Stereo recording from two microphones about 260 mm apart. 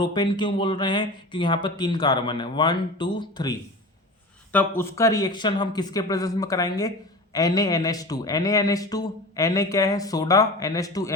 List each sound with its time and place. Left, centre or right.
0.0 s a man's voice: centre